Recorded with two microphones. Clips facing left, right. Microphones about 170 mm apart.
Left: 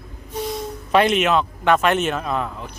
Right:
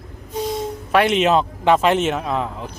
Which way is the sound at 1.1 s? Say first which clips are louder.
Right 2 dB; 30° right (ahead or behind).